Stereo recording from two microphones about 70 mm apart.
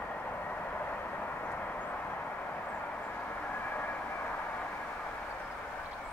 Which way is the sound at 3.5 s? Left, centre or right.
Left.